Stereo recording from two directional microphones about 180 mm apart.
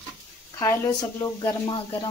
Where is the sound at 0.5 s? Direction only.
15° left (ahead or behind).